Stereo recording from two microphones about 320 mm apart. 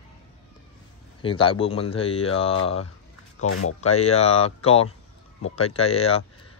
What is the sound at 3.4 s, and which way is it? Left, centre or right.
Speech, left.